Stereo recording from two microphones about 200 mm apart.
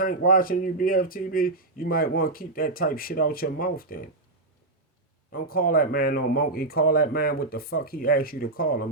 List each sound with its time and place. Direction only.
0.0 s speech: 45° left (ahead or behind)
5.3 s speech: 45° left (ahead or behind)